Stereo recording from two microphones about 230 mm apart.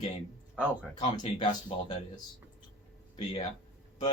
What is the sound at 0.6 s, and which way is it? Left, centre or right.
Speech, centre.